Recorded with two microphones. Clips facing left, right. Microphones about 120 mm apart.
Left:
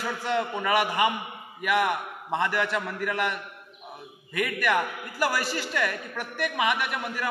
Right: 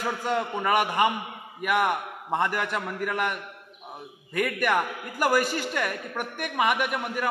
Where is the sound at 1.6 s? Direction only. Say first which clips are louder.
Even; 45° right (ahead or behind).